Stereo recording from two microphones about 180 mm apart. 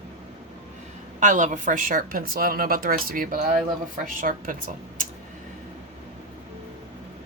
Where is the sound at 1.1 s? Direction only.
45° right (ahead or behind).